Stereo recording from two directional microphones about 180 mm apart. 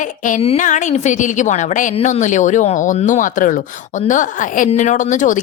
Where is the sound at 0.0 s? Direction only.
45° left (ahead or behind).